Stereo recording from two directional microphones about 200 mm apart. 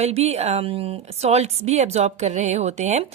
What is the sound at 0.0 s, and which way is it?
A woman's voice, 30° right (ahead or behind).